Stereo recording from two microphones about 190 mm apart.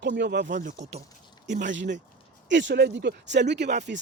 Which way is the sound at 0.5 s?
40° right (ahead or behind).